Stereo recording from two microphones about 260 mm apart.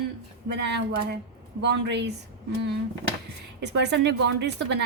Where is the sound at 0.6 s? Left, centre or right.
Right.